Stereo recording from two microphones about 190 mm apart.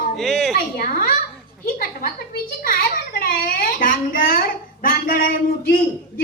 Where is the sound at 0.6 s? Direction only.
50° left (ahead or behind).